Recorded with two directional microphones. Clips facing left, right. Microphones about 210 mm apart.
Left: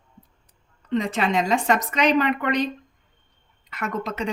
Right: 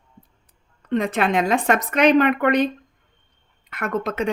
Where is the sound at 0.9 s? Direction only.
55° right (ahead or behind).